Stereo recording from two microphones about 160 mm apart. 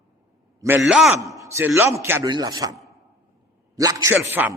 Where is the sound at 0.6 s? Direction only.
15° right (ahead or behind).